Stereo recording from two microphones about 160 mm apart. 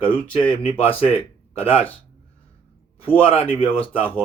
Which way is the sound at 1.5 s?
35° left (ahead or behind).